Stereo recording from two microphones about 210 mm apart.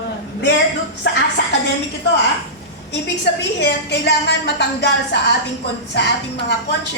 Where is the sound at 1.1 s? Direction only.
55° left (ahead or behind).